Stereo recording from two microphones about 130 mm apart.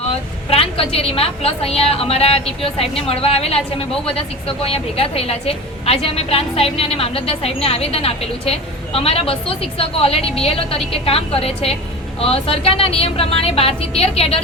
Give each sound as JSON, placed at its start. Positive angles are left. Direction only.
{"t": 0.5, "sound": "a woman's voice", "side_deg": 45}